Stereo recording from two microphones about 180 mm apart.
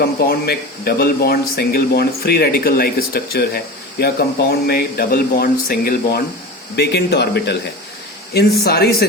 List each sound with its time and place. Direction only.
0.0 s speech: 60° left (ahead or behind)
6.7 s speech: 65° left (ahead or behind)